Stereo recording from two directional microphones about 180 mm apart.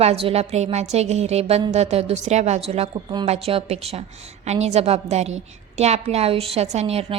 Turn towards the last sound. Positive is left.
turn(degrees=-35)  # may be behind; listen again after turning